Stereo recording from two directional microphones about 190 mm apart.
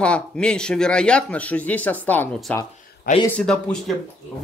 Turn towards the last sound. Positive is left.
turn(degrees=5)  # may be behind; listen again after turning